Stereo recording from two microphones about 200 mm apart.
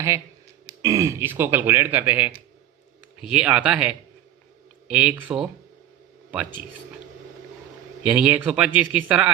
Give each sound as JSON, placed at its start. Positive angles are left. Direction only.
{"t": 0.8, "sound": "speech", "side_deg": -15}
{"t": 8.0, "sound": "speech", "side_deg": -5}